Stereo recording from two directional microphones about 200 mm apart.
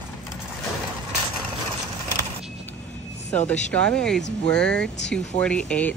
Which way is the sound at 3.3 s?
5° left (ahead or behind).